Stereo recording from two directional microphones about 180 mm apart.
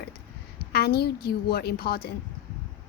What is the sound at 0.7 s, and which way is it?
A woman's voice, 60° left (ahead or behind).